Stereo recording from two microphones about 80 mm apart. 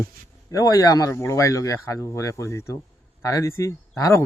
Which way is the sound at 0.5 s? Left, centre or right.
Left.